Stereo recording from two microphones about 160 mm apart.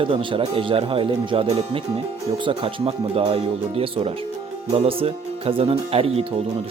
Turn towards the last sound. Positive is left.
turn(degrees=-35)  # may be behind; listen again after turning